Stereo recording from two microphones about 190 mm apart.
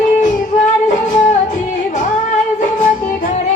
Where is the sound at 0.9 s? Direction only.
40° left (ahead or behind).